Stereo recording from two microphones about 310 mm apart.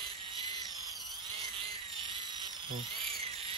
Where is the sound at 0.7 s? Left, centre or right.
Centre.